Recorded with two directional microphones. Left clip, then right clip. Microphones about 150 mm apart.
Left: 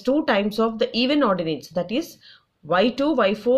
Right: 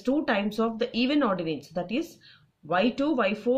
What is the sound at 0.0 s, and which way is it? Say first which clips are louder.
Speech: left 6 dB; 25° left (ahead or behind).